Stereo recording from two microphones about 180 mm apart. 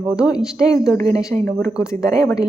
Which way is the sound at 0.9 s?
20° left (ahead or behind).